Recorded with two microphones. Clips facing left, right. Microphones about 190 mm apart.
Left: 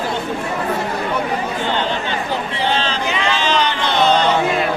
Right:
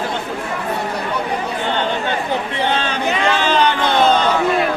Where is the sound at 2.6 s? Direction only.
55° right (ahead or behind).